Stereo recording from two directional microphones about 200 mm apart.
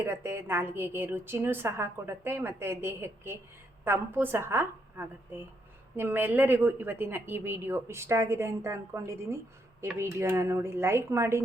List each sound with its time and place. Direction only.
0.0 s a woman's voice: 10° right (ahead or behind)